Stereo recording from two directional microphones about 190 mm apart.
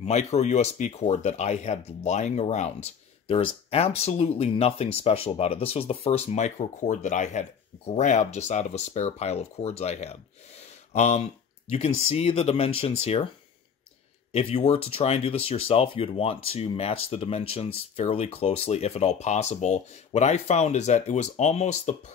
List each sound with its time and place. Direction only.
0.0 s speech: 35° left (ahead or behind)
14.3 s speech: 30° left (ahead or behind)